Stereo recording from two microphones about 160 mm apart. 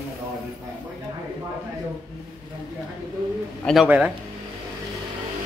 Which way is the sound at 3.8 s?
10° right (ahead or behind).